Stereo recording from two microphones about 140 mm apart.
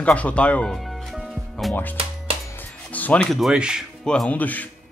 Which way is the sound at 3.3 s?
5° right (ahead or behind).